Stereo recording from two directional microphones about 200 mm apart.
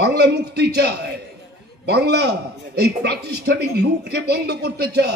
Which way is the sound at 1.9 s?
55° right (ahead or behind).